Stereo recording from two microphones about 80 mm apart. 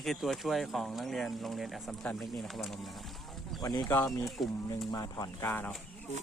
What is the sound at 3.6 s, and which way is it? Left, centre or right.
Speech, left.